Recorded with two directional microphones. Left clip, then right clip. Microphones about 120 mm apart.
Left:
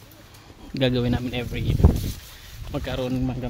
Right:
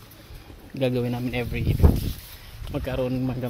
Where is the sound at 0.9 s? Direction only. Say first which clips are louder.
Left 2 dB; 60° left (ahead or behind).